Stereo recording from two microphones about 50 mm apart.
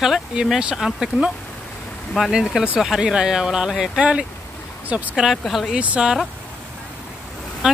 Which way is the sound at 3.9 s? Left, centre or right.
Right.